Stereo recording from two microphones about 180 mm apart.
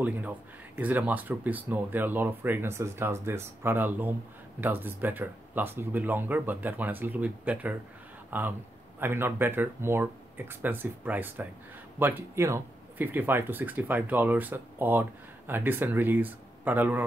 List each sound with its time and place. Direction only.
0.0 s speech: 10° right (ahead or behind)